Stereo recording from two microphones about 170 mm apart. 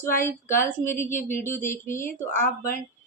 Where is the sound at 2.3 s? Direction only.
50° left (ahead or behind).